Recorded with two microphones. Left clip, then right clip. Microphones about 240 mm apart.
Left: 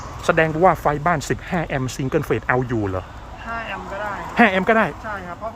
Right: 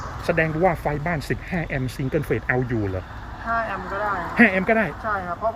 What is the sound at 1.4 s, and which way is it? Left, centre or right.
Speech, left.